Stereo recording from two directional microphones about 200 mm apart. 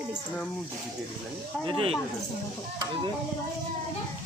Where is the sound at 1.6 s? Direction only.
25° right (ahead or behind).